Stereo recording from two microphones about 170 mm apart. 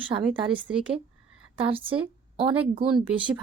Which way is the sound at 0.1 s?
30° right (ahead or behind).